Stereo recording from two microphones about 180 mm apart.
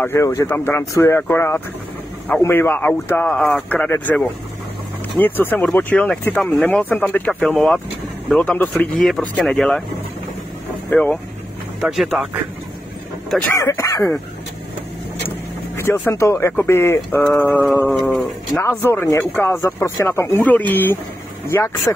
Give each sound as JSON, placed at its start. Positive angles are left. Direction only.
{"t": 0.0, "sound": "speech", "side_deg": 15}
{"t": 10.9, "sound": "speech", "side_deg": 10}
{"t": 11.8, "sound": "speech", "side_deg": 0}
{"t": 13.5, "sound": "speech", "side_deg": 15}
{"t": 15.2, "sound": "vehicle", "side_deg": 15}
{"t": 16.1, "sound": "speech", "side_deg": 15}